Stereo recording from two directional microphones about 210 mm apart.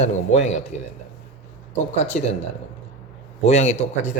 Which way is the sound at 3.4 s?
30° left (ahead or behind).